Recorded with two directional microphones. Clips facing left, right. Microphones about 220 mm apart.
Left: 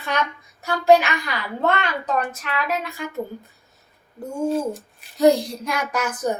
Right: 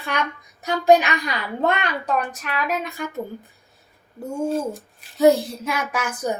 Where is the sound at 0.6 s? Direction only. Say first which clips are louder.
Even; 20° right (ahead or behind).